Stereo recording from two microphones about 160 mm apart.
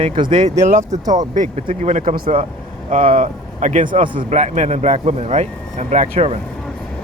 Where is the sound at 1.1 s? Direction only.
50° right (ahead or behind).